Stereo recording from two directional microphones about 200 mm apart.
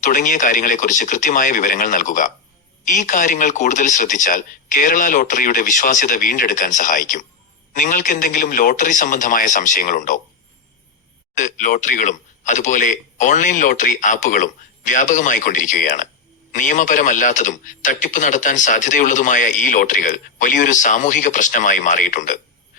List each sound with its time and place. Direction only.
0.0 s a man's voice: 40° left (ahead or behind)
11.3 s a man's voice: 40° left (ahead or behind)